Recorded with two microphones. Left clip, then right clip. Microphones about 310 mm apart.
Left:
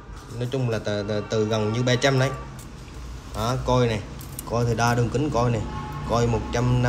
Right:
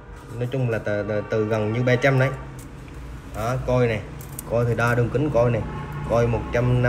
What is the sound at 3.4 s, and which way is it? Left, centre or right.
Speech, centre.